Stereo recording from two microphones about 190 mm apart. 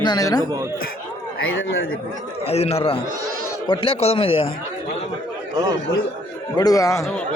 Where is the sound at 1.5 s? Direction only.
90° left.